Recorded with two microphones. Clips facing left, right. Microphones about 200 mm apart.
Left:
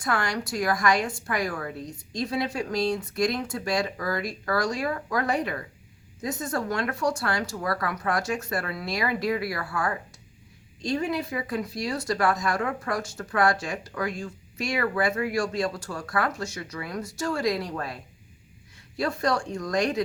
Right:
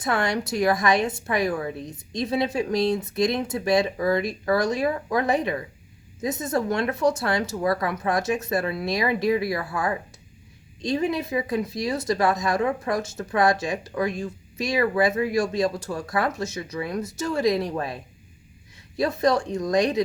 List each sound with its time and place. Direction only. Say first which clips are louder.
0.0 s speech: right 4 dB; 25° right (ahead or behind)